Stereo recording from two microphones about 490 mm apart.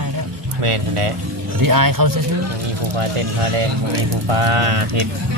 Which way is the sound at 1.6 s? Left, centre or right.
Right.